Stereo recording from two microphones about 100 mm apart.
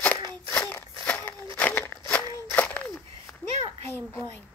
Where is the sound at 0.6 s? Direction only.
15° left (ahead or behind).